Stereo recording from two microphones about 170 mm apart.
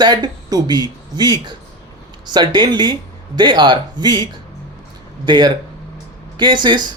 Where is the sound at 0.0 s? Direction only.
25° right (ahead or behind).